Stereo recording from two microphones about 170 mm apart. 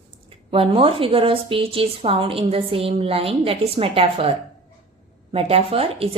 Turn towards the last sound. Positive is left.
turn(degrees=-35)  # may be behind; listen again after turning